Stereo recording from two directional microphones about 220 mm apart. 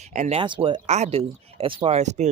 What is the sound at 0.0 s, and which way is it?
Speech, 30° right (ahead or behind).